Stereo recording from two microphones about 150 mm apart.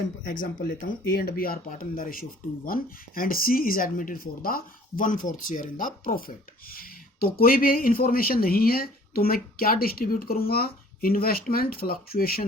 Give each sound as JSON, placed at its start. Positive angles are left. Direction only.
{"t": 0.3, "sound": "speech", "side_deg": 65}
{"t": 6.7, "sound": "speech", "side_deg": 85}